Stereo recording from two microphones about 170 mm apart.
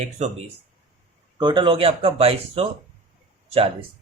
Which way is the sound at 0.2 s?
40° right (ahead or behind).